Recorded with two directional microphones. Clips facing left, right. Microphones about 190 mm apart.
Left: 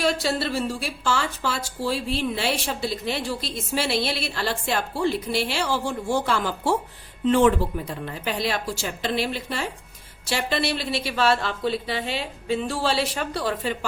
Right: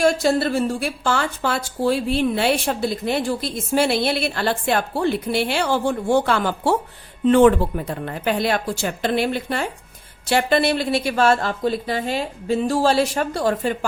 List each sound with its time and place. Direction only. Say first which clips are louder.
0.0 s a woman's voice: right 6 dB; 50° right (ahead or behind)